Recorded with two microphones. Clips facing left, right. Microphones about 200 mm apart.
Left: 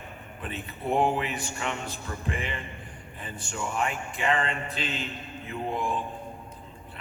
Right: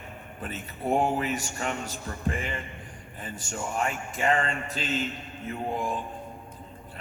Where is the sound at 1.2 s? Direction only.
40° right (ahead or behind).